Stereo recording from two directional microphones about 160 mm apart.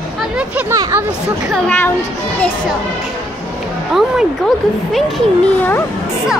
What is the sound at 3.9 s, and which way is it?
A child's voice, centre (ahead or behind).